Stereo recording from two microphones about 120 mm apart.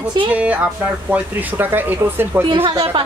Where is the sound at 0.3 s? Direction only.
10° right (ahead or behind).